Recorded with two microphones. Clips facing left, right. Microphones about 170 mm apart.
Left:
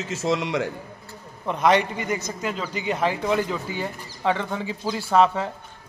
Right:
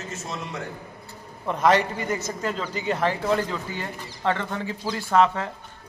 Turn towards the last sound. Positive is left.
turn(degrees=10)  # may be behind; listen again after turning